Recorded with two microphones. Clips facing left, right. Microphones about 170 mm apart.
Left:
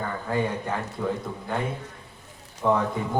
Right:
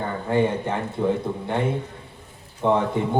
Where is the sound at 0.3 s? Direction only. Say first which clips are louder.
Right 6 dB; 25° right (ahead or behind).